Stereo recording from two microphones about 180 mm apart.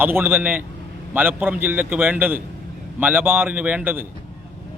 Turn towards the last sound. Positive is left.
turn(degrees=-10)  # may be behind; listen again after turning